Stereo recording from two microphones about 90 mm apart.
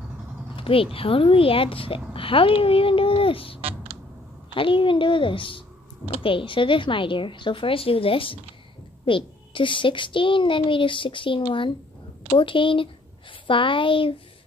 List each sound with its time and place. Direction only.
0.6 s a woman's voice: 90° left
3.6 s a sound: 90° right
4.6 s a child's voice: 70° left (ahead or behind)
9.0 s a child's voice: 70° left (ahead or behind)